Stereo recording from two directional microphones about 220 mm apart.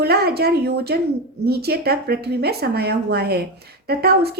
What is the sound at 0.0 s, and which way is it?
Speech, 45° right (ahead or behind).